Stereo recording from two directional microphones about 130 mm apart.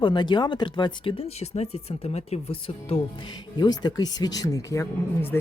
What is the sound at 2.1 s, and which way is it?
Speech, 50° left (ahead or behind).